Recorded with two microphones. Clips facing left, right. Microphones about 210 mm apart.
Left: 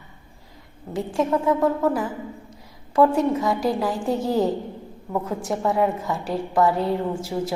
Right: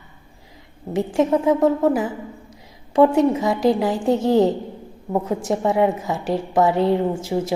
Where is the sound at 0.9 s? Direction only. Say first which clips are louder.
Right 4 dB; 20° right (ahead or behind).